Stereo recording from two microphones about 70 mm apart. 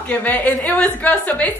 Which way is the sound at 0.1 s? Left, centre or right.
Left.